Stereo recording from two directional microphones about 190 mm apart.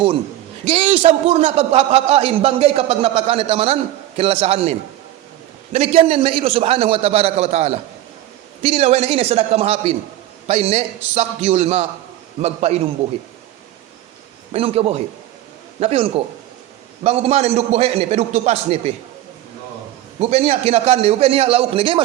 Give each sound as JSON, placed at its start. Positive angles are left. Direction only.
{"t": 0.6, "sound": "a man's voice", "side_deg": -30}
{"t": 5.7, "sound": "a man's voice", "side_deg": -35}
{"t": 14.5, "sound": "a man's voice", "side_deg": -30}
{"t": 20.1, "sound": "a man's voice", "side_deg": -35}